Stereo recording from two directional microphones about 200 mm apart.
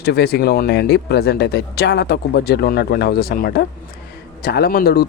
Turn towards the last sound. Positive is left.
turn(degrees=50)  # may be behind; listen again after turning